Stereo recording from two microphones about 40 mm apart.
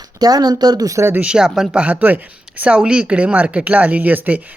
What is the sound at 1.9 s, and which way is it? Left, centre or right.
Speech, right.